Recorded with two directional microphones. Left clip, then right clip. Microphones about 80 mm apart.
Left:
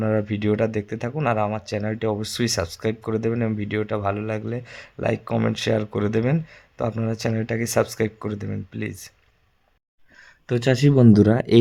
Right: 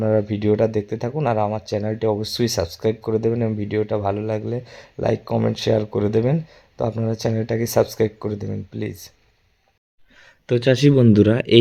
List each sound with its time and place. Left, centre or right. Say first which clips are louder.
0.0 s speech: right 4 dB; centre
0.3 s speech: right 4 dB; right
10.2 s a sound: right 1 dB; right
10.5 s speech: right 4 dB; centre